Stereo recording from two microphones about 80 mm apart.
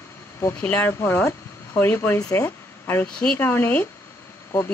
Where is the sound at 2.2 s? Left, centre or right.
Left.